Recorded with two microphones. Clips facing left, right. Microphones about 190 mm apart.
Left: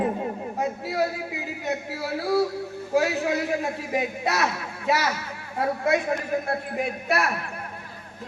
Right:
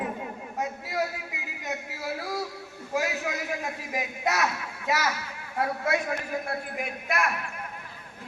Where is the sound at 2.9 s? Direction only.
30° left (ahead or behind).